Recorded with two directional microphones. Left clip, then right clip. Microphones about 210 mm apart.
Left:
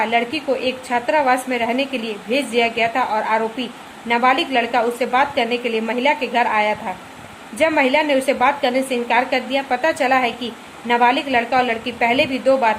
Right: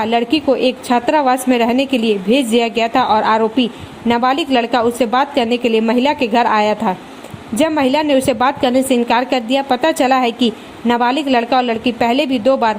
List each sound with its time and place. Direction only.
0.0 s a woman's voice: 35° right (ahead or behind)